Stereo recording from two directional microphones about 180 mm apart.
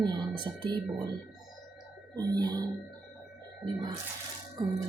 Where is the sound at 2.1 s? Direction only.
20° right (ahead or behind).